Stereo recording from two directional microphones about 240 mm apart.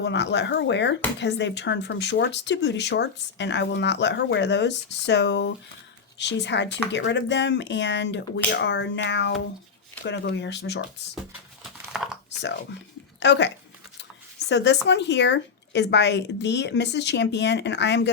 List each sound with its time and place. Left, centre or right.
0.0 s speech: left
13.1 s speech: left
14.5 s speech: left